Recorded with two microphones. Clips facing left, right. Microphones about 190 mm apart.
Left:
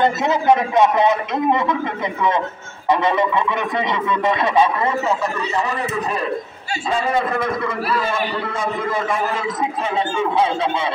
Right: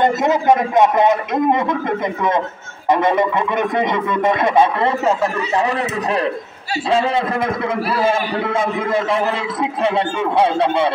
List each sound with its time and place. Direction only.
0.0 s a man's voice: 15° right (ahead or behind)
3.5 s speech: 50° right (ahead or behind); by 6.2 s 70° right (ahead or behind)
8.5 s a man's voice: 60° right (ahead or behind)